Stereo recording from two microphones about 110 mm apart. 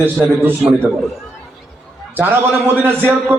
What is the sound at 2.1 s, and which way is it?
A man's voice, 20° right (ahead or behind).